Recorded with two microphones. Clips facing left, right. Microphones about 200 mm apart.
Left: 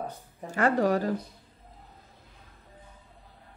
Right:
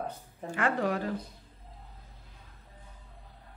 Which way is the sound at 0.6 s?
40° left (ahead or behind).